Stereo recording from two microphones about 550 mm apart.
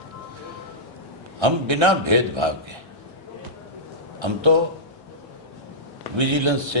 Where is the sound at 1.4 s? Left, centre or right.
Right.